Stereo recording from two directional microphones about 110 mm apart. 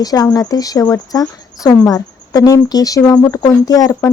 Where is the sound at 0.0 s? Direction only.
35° left (ahead or behind).